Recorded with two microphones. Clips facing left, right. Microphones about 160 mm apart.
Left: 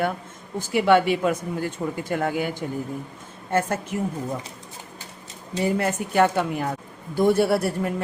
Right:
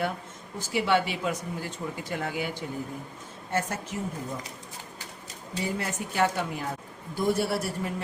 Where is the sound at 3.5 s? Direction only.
55° left (ahead or behind).